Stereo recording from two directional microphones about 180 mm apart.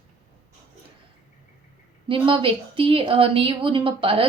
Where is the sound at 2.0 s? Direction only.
30° right (ahead or behind).